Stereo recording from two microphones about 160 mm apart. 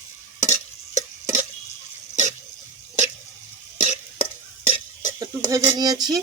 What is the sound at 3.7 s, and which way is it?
Stir, 50° left (ahead or behind).